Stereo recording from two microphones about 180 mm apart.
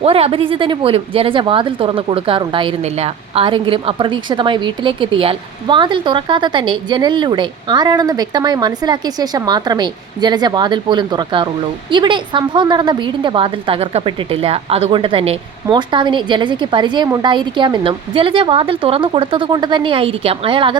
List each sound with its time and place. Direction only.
0.0 s speech: 30° right (ahead or behind)